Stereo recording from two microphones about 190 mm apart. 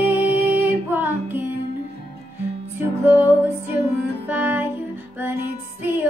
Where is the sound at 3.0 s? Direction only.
10° right (ahead or behind).